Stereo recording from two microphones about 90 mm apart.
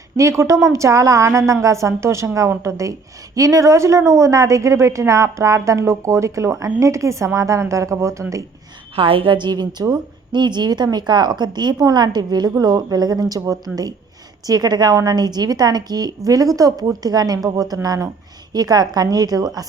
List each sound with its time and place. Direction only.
0.2 s a woman's voice: 35° right (ahead or behind)
9.0 s a woman's voice: 75° right (ahead or behind); by 19.6 s 45° right (ahead or behind)